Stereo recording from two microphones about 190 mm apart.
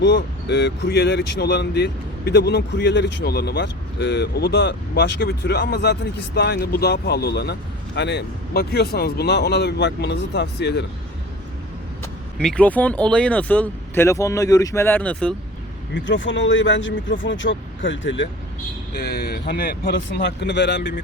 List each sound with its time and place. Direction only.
0.0 s speech: 65° left (ahead or behind)
12.4 s speech: 5° left (ahead or behind)
16.0 s speech: 80° left
18.9 s speech: 60° left (ahead or behind)